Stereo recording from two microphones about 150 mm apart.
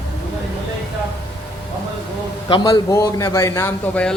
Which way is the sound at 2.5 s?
25° left (ahead or behind).